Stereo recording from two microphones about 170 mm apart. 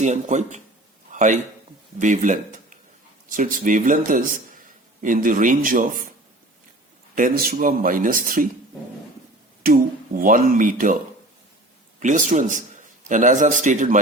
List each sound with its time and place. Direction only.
0.0 s speech: 45° right (ahead or behind)
1.1 s a sound: 50° right (ahead or behind)
2.0 s speech: 50° right (ahead or behind)
7.2 s speech: 55° right (ahead or behind)
9.6 s speech: 55° right (ahead or behind)
11.9 s speech: 45° right (ahead or behind)